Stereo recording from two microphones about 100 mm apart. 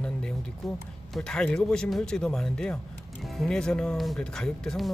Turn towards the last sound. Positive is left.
turn(degrees=5)  # may be behind; listen again after turning